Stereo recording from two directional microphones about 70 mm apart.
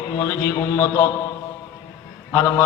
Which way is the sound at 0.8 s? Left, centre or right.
Left.